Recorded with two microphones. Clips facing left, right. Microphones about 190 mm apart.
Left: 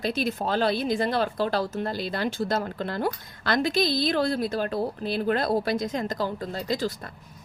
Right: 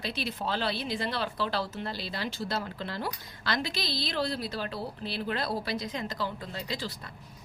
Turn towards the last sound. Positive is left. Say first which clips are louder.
# left 8 dB
turn(degrees=45)  # may be behind; listen again after turning